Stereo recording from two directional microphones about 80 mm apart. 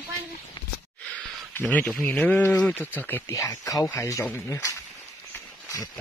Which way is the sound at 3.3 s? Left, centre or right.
Left.